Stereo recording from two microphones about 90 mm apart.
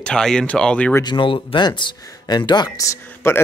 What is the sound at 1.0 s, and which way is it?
Speech, 65° left (ahead or behind).